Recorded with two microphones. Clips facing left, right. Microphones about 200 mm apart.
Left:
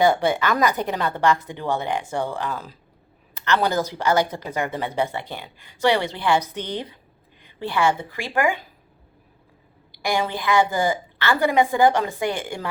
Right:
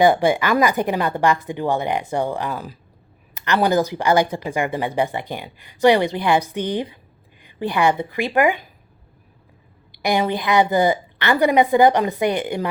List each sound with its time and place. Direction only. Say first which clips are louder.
0.0 s a woman's voice: right 3 dB; 15° right (ahead or behind)
10.0 s speech: right 4 dB; 20° right (ahead or behind)